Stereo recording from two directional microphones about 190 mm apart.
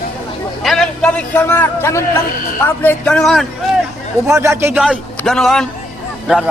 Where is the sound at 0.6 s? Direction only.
Centre (ahead or behind).